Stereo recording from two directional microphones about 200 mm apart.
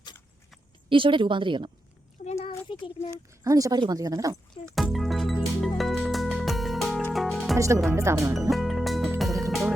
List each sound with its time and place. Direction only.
0.9 s a woman's voice: 25° right (ahead or behind)
2.2 s a sound: 30° left (ahead or behind)
3.4 s speech: 15° right (ahead or behind)
4.6 s music: centre (ahead or behind)
7.5 s speech: 15° right (ahead or behind)
8.4 s music: centre (ahead or behind)